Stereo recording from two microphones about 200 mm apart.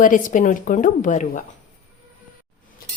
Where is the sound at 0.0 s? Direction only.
40° left (ahead or behind).